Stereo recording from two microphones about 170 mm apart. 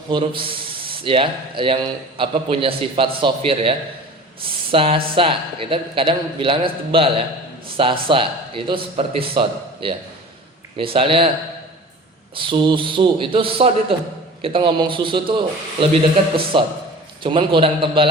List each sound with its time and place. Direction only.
0.1 s a man's voice: 30° right (ahead or behind)
12.3 s a man's voice: 30° right (ahead or behind)